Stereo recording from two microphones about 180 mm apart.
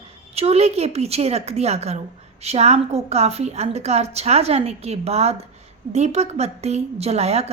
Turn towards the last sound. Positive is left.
turn(degrees=-35)  # may be behind; listen again after turning